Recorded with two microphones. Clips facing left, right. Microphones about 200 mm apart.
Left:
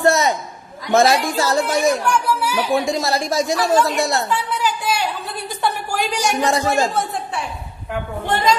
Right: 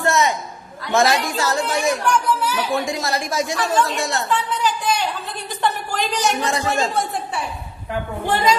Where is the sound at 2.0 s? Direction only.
10° left (ahead or behind).